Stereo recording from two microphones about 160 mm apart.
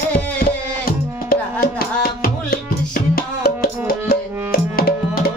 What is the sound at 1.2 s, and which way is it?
Music, 65° left (ahead or behind).